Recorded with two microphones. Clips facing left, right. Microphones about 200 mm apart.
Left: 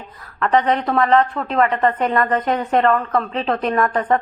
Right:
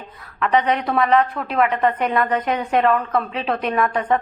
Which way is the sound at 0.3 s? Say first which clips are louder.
Left 1 dB; 5° right (ahead or behind).